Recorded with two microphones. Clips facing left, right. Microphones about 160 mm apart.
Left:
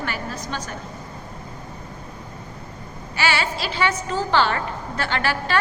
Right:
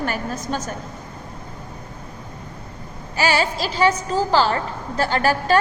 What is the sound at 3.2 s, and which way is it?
A woman's voice, 40° right (ahead or behind).